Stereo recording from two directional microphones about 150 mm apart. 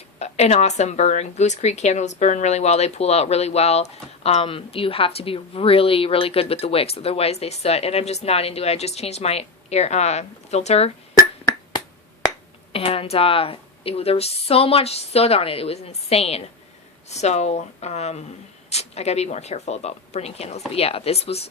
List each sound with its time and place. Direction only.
0.2 s a woman's voice: 45° left (ahead or behind)
12.7 s a woman's voice: 40° left (ahead or behind)